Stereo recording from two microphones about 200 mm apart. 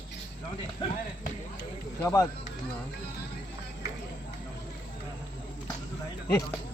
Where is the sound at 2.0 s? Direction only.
15° left (ahead or behind).